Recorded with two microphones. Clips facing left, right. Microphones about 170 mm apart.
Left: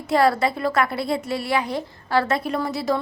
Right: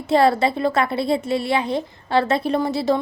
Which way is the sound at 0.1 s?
25° right (ahead or behind).